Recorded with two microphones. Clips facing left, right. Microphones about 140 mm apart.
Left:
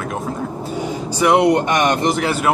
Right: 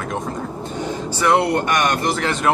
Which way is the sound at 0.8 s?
10° left (ahead or behind).